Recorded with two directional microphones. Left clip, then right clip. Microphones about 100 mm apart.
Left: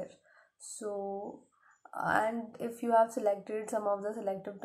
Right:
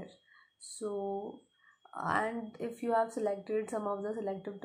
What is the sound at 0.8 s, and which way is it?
Speech, 15° right (ahead or behind).